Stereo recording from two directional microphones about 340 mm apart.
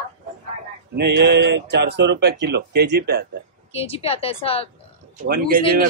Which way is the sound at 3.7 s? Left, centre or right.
Centre.